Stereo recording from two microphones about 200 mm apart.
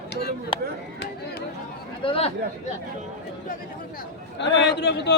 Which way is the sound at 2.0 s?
30° left (ahead or behind).